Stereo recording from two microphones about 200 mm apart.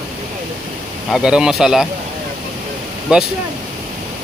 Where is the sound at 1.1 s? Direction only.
5° right (ahead or behind).